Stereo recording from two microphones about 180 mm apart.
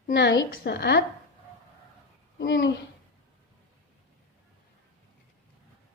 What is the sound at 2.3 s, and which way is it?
Speech, 80° left.